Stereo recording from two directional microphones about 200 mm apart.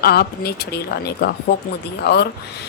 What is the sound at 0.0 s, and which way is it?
A woman's voice, 50° left (ahead or behind).